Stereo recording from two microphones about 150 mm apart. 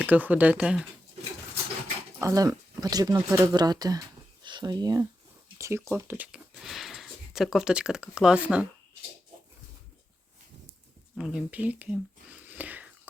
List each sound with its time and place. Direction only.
0.0 s speech: 10° right (ahead or behind)
2.2 s speech: 20° right (ahead or behind); by 8.6 s 5° right (ahead or behind)
11.2 s speech: 5° right (ahead or behind)